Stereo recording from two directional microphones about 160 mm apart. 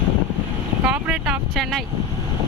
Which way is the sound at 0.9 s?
5° right (ahead or behind).